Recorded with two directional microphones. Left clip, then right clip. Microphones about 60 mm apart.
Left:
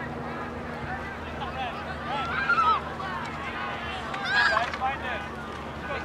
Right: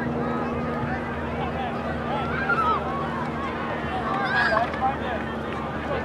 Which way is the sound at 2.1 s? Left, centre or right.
Left.